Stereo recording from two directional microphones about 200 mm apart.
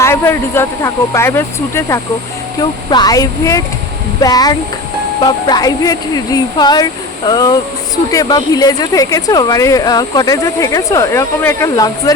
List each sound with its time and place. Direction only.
0.0 s a woman's voice: 10° left (ahead or behind)